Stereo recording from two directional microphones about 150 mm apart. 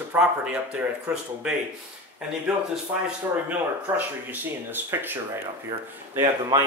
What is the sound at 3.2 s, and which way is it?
Speech, 20° right (ahead or behind).